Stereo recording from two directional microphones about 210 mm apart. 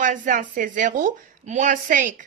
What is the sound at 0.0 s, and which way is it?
A woman's voice, 40° right (ahead or behind).